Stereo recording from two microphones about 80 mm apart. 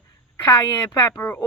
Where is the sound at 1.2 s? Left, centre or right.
Left.